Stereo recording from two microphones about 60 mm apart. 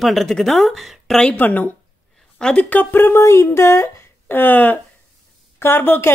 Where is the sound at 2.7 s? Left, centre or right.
Left.